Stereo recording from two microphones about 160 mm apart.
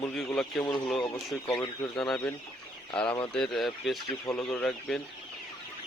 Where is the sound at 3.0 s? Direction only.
30° left (ahead or behind).